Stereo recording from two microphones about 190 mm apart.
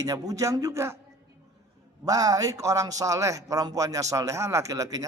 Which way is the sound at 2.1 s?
20° right (ahead or behind).